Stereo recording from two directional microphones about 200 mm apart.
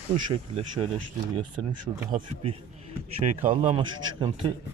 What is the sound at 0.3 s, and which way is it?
Speech, 30° right (ahead or behind).